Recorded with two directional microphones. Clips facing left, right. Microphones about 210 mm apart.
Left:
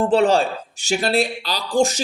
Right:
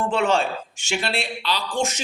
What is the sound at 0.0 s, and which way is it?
Speech, 35° left (ahead or behind).